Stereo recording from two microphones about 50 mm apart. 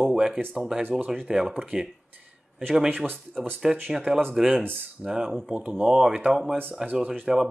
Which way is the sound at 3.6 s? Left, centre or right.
Centre.